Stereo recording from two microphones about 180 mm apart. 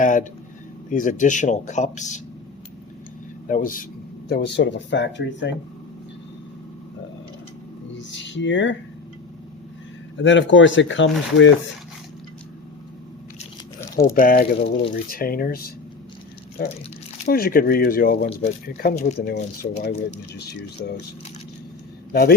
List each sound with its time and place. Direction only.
0.0 s a sound: 45° left (ahead or behind)
0.9 s speech: 45° left (ahead or behind)
3.5 s speech: 50° left (ahead or behind)
4.3 s speech: 70° left (ahead or behind)
7.9 s speech: 85° left
10.2 s speech: 90° left
14.0 s speech: 55° left (ahead or behind)
17.2 s speech: 55° left (ahead or behind)
22.1 s a man's voice: 60° left (ahead or behind)